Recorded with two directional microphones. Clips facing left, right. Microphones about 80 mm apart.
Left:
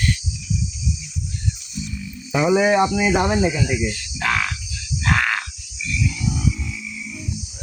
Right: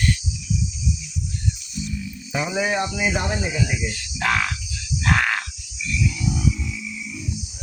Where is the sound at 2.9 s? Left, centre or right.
Left.